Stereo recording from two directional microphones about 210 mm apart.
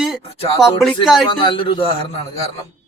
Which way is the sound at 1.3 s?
25° left (ahead or behind).